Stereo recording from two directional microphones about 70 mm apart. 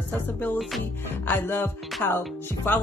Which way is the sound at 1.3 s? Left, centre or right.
Left.